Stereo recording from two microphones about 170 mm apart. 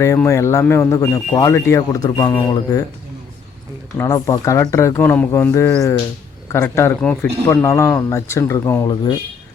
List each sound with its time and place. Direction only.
0.0 s speech: 15° left (ahead or behind)
3.9 s speech: 20° left (ahead or behind)